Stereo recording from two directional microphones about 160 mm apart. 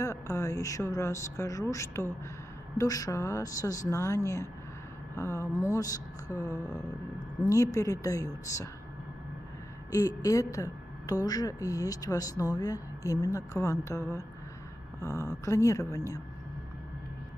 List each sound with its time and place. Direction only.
0.0 s speech: 20° left (ahead or behind)
9.8 s a woman's voice: 20° left (ahead or behind)